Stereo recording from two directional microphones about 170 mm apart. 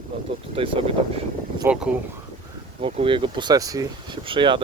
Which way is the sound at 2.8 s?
35° right (ahead or behind).